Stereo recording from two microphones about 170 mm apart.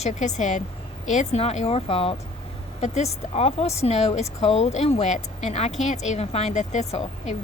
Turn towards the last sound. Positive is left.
turn(degrees=40)  # may be behind; listen again after turning